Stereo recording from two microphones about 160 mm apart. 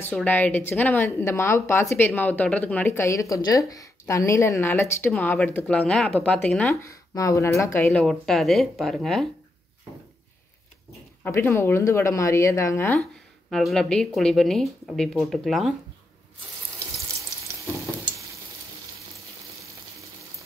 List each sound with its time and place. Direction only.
0.0 s speech: 10° left (ahead or behind)
6.7 s speech: 20° left (ahead or behind)
7.9 s speech: centre (ahead or behind)
11.2 s speech: 15° left (ahead or behind)
13.5 s speech: centre (ahead or behind)